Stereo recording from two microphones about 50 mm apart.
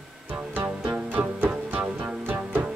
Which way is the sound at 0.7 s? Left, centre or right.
Right.